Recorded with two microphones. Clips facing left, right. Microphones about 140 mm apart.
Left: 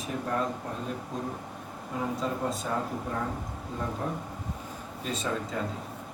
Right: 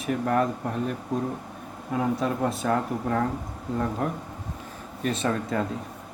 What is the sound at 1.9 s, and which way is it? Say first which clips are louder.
Speech: right 6 dB; 65° right (ahead or behind).